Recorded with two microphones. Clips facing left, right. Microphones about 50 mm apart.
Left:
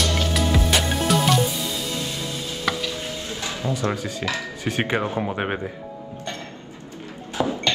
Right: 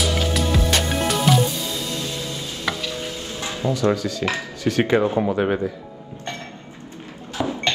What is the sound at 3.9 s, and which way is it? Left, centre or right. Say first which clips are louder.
Speech: right 4 dB; left.